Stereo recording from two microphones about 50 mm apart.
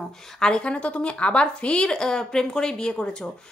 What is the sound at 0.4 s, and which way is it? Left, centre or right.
A woman's voice, centre.